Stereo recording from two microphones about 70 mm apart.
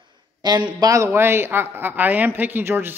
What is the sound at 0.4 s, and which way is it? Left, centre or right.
Speech, right.